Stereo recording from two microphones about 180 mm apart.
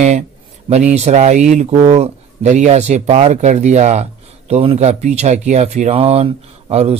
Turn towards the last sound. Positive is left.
turn(degrees=-35)  # may be behind; listen again after turning